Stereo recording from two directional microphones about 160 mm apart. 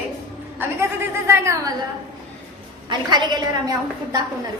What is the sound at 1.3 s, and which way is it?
Speech, 15° right (ahead or behind).